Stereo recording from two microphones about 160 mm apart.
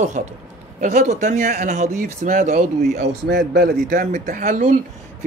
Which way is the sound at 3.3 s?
70° right (ahead or behind).